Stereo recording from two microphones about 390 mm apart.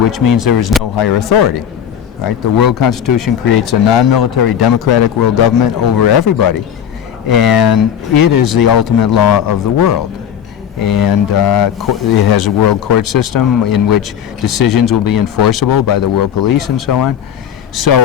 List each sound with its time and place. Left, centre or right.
0.1 s speech: left
0.9 s a man's voice: left